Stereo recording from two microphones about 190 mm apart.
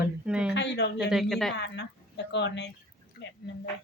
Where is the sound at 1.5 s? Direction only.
65° left (ahead or behind).